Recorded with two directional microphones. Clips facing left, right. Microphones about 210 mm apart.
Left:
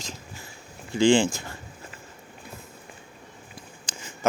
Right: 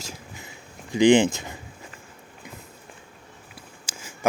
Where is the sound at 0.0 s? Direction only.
15° right (ahead or behind).